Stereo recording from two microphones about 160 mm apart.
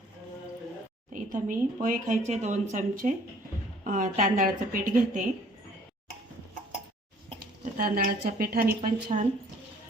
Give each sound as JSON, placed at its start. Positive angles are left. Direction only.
{"t": 1.1, "sound": "a woman's voice", "side_deg": -55}
{"t": 7.6, "sound": "speech", "side_deg": -65}